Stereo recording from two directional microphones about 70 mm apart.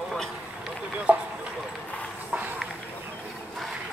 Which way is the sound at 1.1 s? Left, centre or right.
Centre.